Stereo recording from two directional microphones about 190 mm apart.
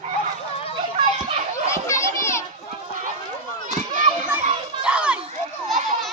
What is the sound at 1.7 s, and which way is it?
Children playing, 15° left (ahead or behind).